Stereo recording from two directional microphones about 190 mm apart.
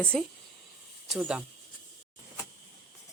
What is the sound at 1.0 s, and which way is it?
Speech, 5° right (ahead or behind).